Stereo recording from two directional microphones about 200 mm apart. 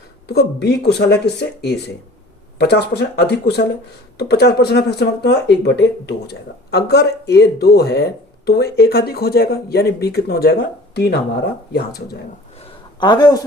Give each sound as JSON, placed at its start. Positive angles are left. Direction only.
{"t": 0.3, "sound": "speech", "side_deg": 55}
{"t": 13.0, "sound": "a man's voice", "side_deg": 20}